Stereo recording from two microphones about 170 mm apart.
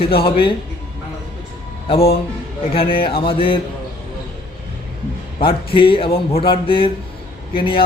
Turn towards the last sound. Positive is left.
turn(degrees=30)  # may be behind; listen again after turning